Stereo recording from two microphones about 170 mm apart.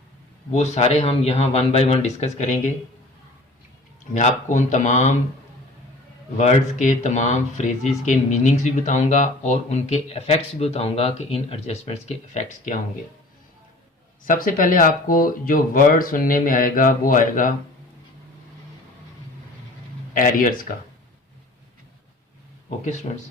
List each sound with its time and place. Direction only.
0.5 s speech: 40° left (ahead or behind)
4.1 s speech: 45° left (ahead or behind)
6.3 s speech: 45° left (ahead or behind)
14.3 s speech: 55° left (ahead or behind)
20.1 s speech: 55° left (ahead or behind)